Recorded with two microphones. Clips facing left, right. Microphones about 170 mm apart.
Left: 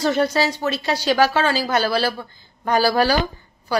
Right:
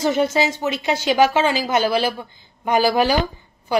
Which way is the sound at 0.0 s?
15° right (ahead or behind).